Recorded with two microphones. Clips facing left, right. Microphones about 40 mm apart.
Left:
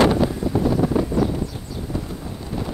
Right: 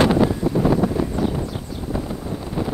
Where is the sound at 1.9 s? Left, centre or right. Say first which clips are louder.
Right 4 dB; centre.